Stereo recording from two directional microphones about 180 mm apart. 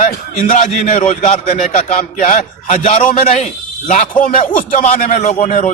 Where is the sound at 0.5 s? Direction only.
40° left (ahead or behind).